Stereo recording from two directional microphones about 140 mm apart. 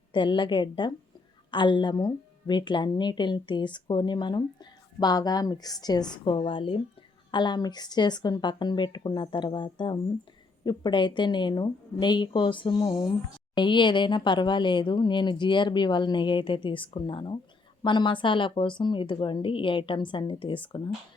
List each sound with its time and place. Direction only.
0.1 s a woman's voice: 35° left (ahead or behind)